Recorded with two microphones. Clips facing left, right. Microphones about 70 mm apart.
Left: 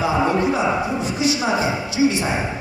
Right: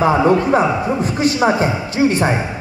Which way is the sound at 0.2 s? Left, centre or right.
Right.